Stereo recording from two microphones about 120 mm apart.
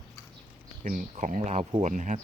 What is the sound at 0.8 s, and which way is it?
Speech, 90° right.